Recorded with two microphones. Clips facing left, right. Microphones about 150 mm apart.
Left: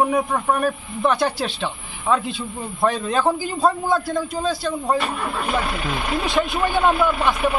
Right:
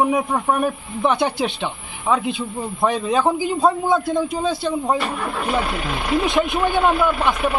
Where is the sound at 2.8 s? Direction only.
15° right (ahead or behind).